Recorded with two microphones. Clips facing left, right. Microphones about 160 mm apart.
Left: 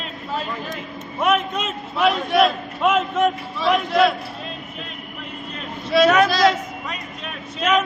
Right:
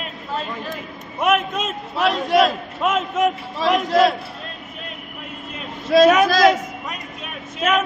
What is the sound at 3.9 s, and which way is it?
Speech, 40° right (ahead or behind).